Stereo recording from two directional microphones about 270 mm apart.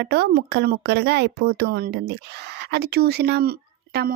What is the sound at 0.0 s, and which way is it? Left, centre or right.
Speech, right.